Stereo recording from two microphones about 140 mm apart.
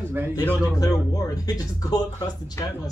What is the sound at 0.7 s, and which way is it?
Speech, 25° left (ahead or behind).